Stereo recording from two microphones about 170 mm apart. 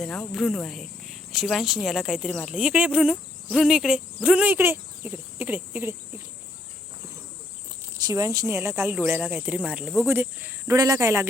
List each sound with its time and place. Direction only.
0.0 s speech: 5° left (ahead or behind)
7.9 s speech: 20° right (ahead or behind)